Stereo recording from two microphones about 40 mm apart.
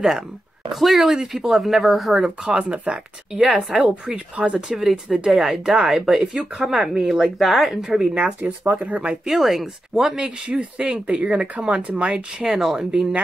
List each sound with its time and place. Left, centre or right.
0.7 s speech: centre
2.2 s speech: right
4.6 s speech: centre
8.1 s speech: right
9.3 s speech: centre
10.5 s speech: right
12.4 s speech: centre